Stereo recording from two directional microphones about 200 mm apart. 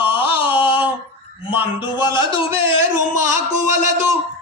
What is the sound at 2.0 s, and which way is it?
Music, 20° left (ahead or behind).